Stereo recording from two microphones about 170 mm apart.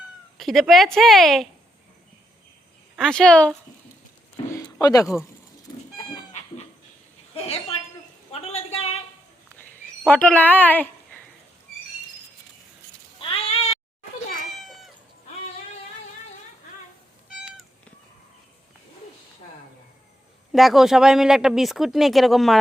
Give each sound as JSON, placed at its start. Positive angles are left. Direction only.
{"t": 0.3, "sound": "speech", "side_deg": 0}
{"t": 2.9, "sound": "a woman's voice", "side_deg": 5}
{"t": 4.4, "sound": "a sound", "side_deg": 20}
{"t": 7.3, "sound": "a sound", "side_deg": 35}
{"t": 10.1, "sound": "speech", "side_deg": 10}
{"t": 13.1, "sound": "cat", "side_deg": 35}
{"t": 14.6, "sound": "cat", "side_deg": 0}
{"t": 17.2, "sound": "cat", "side_deg": -5}
{"t": 20.5, "sound": "speech", "side_deg": 0}